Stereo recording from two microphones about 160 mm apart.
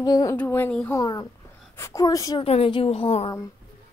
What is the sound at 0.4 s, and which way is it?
Speech, 10° left (ahead or behind).